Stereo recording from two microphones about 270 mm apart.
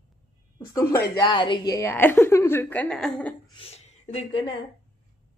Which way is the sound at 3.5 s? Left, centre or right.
Left.